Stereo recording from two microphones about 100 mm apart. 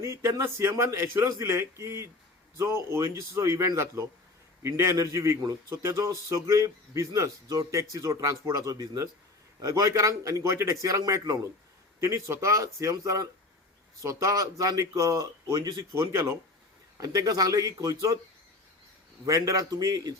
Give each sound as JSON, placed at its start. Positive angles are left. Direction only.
{"t": 0.0, "sound": "a man's voice", "side_deg": -30}
{"t": 16.0, "sound": "a man's voice", "side_deg": -30}
{"t": 19.2, "sound": "a man's voice", "side_deg": -35}